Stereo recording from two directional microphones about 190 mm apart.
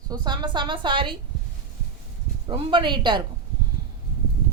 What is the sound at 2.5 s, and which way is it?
Speech, 25° right (ahead or behind).